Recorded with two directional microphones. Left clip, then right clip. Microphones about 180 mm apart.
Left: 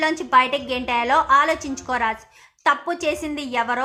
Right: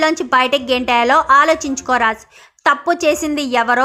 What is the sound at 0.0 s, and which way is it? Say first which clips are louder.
A woman's voice: right 3 dB; 25° right (ahead or behind).